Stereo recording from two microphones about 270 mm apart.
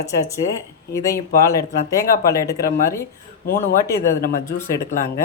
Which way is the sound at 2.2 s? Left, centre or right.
Centre.